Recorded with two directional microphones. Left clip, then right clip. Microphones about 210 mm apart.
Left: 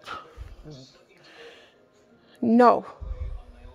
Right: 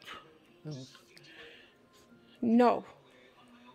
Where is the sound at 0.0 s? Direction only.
25° left (ahead or behind).